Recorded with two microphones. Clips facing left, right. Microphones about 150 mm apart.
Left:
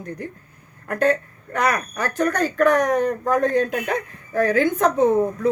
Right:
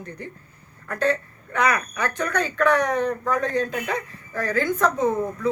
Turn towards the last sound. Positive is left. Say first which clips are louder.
# left 5 dB
turn(degrees=60)  # may be behind; listen again after turning